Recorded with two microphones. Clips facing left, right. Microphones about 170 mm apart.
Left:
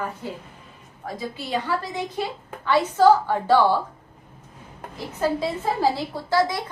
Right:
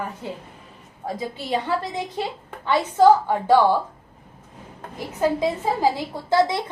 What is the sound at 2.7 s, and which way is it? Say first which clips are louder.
A woman's voice: right 1 dB; 20° right (ahead or behind).